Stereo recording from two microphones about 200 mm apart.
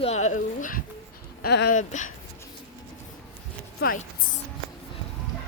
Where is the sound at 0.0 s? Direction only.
35° left (ahead or behind).